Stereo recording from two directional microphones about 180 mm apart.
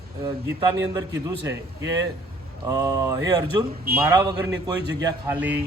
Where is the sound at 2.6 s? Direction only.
20° right (ahead or behind).